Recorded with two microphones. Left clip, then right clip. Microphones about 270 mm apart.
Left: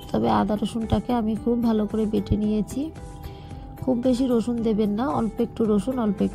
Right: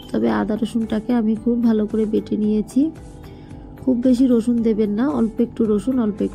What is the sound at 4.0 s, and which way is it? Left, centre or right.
A woman's voice, left.